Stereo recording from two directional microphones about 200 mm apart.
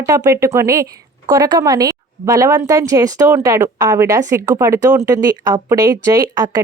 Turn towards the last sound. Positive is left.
turn(degrees=-20)  # may be behind; listen again after turning